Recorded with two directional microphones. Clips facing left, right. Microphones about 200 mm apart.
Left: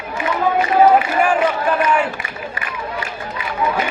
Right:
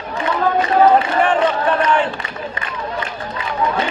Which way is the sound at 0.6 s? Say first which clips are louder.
Even; 10° left (ahead or behind).